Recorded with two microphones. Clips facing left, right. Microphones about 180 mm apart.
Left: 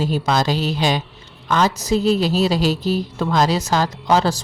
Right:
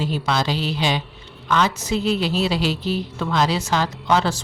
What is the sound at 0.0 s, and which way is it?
A woman's voice, 40° left (ahead or behind).